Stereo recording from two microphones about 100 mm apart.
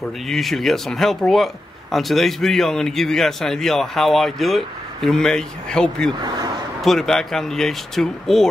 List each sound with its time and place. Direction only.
0.3 s speech: centre (ahead or behind)
6.2 s a sound: 45° right (ahead or behind)
6.8 s speech: 5° left (ahead or behind)